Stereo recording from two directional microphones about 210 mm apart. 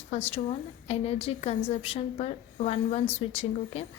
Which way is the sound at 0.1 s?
30° left (ahead or behind).